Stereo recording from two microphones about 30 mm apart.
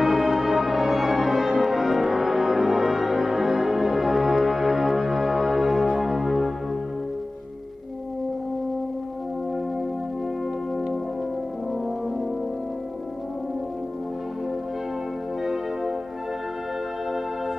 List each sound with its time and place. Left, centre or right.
0.0 s music: centre
15.4 s music: centre